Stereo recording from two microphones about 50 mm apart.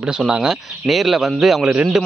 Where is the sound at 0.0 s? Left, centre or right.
Centre.